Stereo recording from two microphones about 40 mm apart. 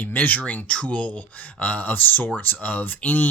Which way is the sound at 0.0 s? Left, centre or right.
Left.